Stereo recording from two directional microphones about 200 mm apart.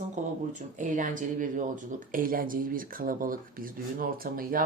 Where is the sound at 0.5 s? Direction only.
40° right (ahead or behind).